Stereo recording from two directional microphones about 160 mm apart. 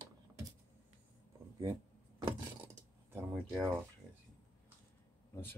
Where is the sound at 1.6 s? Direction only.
25° right (ahead or behind).